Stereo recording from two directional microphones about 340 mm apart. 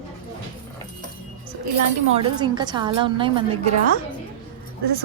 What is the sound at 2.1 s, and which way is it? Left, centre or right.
A woman's voice, centre.